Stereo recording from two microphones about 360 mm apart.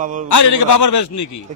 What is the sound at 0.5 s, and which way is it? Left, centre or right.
Speech, left.